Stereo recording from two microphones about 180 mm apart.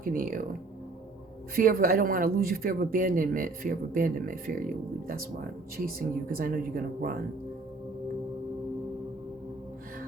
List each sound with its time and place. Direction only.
0.0 s speech: 50° right (ahead or behind)
1.5 s speech: 55° right (ahead or behind)
6.3 s speech: 50° right (ahead or behind)